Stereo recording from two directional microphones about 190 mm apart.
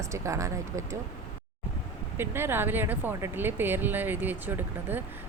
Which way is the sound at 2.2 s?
10° right (ahead or behind).